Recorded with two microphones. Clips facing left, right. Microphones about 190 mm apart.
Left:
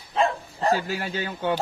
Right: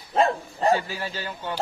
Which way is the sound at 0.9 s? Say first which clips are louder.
Left 3 dB; 55° left (ahead or behind).